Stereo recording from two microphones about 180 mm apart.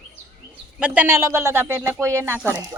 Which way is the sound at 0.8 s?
5° right (ahead or behind).